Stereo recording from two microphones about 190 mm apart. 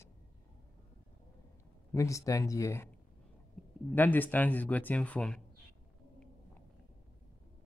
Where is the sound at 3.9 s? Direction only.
10° left (ahead or behind).